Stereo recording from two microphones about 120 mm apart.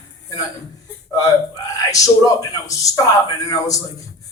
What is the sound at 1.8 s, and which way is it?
A man's voice, 30° left (ahead or behind).